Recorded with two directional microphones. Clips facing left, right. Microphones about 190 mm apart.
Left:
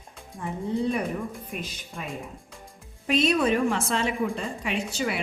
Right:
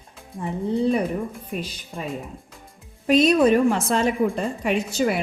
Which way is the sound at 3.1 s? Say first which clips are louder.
Right 6 dB; 40° right (ahead or behind).